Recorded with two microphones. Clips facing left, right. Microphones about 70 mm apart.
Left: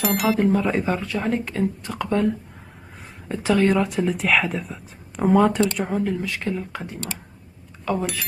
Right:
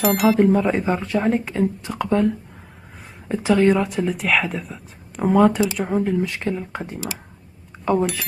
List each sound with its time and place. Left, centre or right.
0.0 s speech: centre
0.4 s speech: right
1.9 s speech: centre
6.2 s speech: right